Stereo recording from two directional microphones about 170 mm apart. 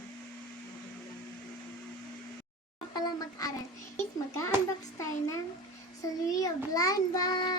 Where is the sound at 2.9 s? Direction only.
20° left (ahead or behind).